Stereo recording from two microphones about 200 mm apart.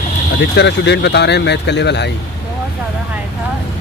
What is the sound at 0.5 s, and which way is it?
Speech, 60° left (ahead or behind).